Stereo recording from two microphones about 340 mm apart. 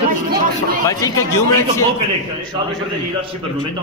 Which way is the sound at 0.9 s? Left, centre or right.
Centre.